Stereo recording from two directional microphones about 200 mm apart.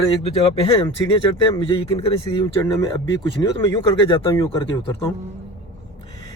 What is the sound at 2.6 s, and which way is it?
Speech, 15° left (ahead or behind).